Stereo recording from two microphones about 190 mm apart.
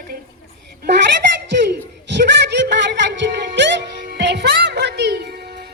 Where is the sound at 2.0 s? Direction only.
65° right (ahead or behind).